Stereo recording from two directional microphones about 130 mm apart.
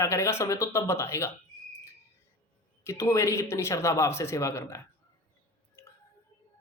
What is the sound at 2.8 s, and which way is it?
Speech, 20° left (ahead or behind).